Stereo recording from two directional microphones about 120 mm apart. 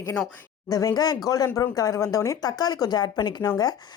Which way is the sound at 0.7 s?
30° left (ahead or behind).